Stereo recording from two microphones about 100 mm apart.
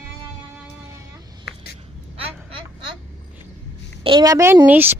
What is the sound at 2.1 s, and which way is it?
Vehicle, 65° right (ahead or behind).